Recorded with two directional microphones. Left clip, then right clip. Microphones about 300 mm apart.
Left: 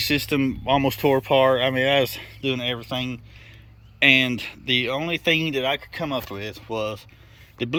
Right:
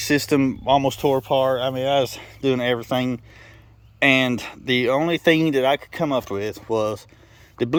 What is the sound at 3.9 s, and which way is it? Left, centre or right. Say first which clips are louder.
Speech: even; centre.